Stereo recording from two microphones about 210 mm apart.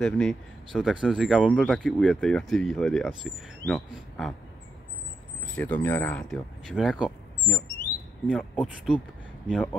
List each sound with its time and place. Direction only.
0.0 s speech: centre (ahead or behind)
5.6 s speech: 5° left (ahead or behind)